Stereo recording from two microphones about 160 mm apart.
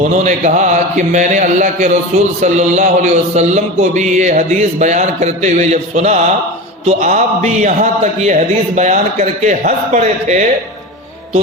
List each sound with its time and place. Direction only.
0.0 s speech: 50° right (ahead or behind)